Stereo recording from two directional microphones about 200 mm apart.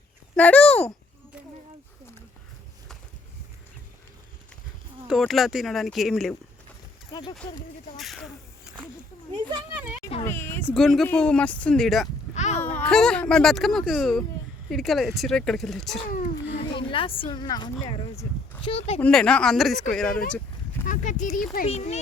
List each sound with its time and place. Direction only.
0.3 s speech: 5° left (ahead or behind)
5.0 s speech: centre (ahead or behind)
7.1 s speech: 20° left (ahead or behind)
7.9 s speech: centre (ahead or behind)
10.2 s speech: 10° left (ahead or behind)
10.7 s speech: centre (ahead or behind)
12.3 s a sound: 35° left (ahead or behind)
12.7 s speech: 5° left (ahead or behind)
16.6 s speech: 25° left (ahead or behind)
18.9 s speech: 5° left (ahead or behind)
20.8 s speech: 40° left (ahead or behind)